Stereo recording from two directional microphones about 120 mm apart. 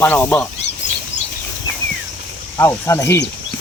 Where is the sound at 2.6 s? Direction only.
20° left (ahead or behind).